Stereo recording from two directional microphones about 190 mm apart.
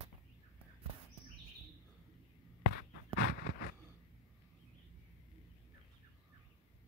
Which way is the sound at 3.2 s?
55° left (ahead or behind).